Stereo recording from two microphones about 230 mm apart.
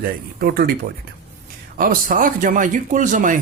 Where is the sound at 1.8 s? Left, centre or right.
Right.